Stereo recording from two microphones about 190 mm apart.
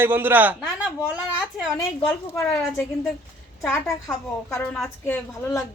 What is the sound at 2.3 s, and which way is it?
A woman's voice, 10° left (ahead or behind).